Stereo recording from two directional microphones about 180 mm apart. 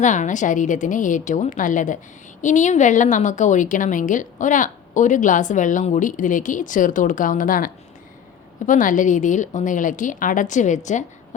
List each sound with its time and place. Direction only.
0.0 s a woman's voice: 45° left (ahead or behind)